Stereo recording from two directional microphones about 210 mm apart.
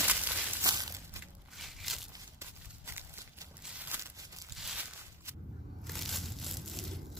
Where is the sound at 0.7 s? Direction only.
15° right (ahead or behind).